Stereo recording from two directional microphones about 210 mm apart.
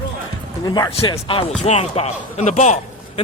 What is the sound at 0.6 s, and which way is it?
Speech, 20° left (ahead or behind).